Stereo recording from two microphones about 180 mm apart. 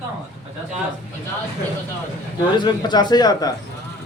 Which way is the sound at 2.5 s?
25° left (ahead or behind).